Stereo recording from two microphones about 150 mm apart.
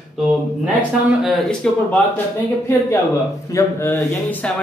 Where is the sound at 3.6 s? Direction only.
20° left (ahead or behind).